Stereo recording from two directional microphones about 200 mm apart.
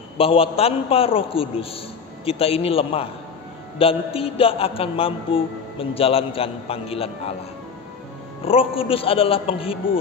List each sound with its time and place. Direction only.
0.2 s a man's voice: 30° left (ahead or behind)
8.5 s a man's voice: 30° left (ahead or behind)